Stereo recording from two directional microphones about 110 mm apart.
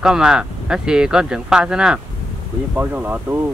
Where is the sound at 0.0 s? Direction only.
5° right (ahead or behind).